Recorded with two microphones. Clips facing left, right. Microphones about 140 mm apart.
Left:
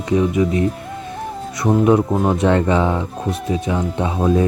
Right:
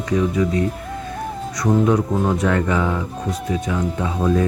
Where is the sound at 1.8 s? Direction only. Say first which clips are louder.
Left 3 dB; 20° left (ahead or behind).